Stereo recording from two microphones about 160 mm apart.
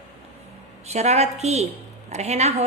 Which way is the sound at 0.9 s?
45° right (ahead or behind).